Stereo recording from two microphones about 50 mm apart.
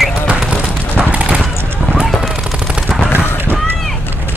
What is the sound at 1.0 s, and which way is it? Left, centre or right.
Clip-clop, right.